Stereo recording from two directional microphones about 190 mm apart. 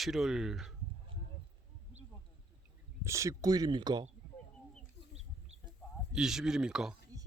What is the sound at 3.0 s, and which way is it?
Speech, 15° right (ahead or behind).